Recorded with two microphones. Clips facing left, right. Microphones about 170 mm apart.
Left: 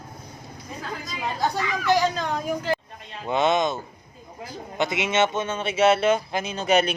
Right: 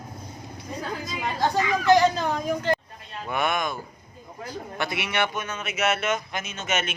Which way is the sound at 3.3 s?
20° left (ahead or behind).